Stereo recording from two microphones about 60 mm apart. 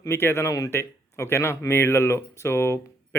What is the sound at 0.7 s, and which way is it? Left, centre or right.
Speech, left.